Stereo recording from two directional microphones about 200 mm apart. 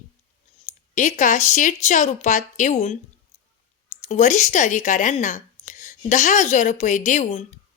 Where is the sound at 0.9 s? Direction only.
40° left (ahead or behind).